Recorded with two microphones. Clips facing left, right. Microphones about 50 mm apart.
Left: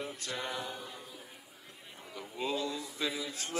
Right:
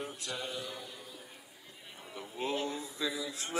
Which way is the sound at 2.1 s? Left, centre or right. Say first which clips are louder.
Even; right.